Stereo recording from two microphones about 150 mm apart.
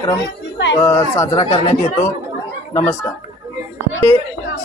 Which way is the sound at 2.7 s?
20° left (ahead or behind).